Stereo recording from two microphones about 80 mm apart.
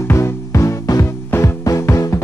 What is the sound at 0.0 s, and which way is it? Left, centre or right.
Music, left.